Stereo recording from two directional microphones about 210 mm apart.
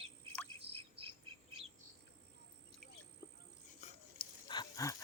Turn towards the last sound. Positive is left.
turn(degrees=20)  # may be behind; listen again after turning